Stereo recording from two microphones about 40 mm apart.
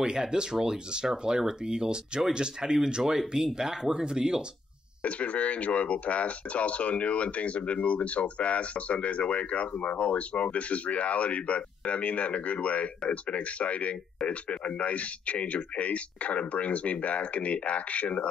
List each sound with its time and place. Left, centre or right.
0.0 s speech: centre
5.0 s speech: left